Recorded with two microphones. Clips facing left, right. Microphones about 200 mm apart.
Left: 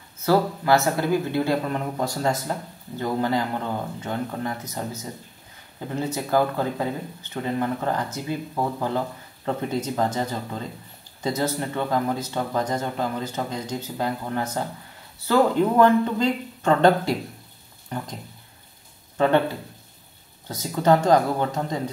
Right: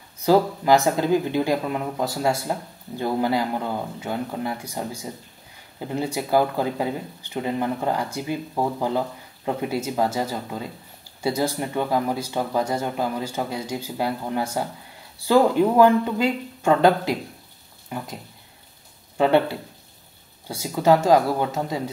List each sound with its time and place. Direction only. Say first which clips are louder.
0.2 s speech: right 2 dB; 15° right (ahead or behind)
19.1 s speech: right 1 dB; 15° right (ahead or behind)
20.4 s speech: right 1 dB; 10° right (ahead or behind)